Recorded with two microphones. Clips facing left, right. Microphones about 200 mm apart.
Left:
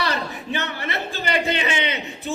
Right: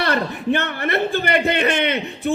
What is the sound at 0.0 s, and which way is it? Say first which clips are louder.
A man's voice: right 5 dB; 55° right (ahead or behind).